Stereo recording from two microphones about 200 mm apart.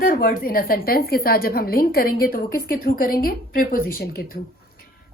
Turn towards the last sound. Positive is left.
turn(degrees=45)  # may be behind; listen again after turning